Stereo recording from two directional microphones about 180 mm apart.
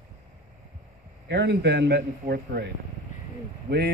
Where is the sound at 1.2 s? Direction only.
70° right (ahead or behind).